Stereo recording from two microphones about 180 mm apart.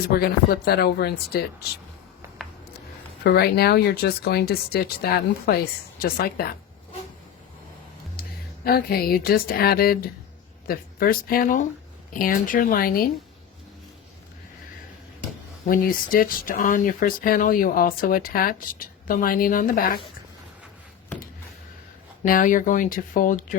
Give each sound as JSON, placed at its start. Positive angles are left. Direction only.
{"t": 0.1, "sound": "speech", "side_deg": 60}
{"t": 2.4, "sound": "a sound", "side_deg": 0}
{"t": 3.2, "sound": "speech", "side_deg": 60}
{"t": 8.2, "sound": "music", "side_deg": 55}
{"t": 8.6, "sound": "speech", "side_deg": 55}
{"t": 15.7, "sound": "speech", "side_deg": 50}
{"t": 22.2, "sound": "speech", "side_deg": 50}